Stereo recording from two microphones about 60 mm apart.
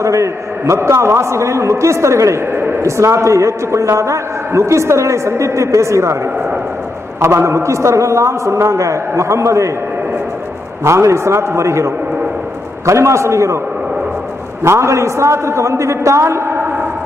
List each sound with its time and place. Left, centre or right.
0.0 s a man's voice: right
7.3 s a man's voice: right
10.8 s a man's voice: right
14.6 s a man's voice: right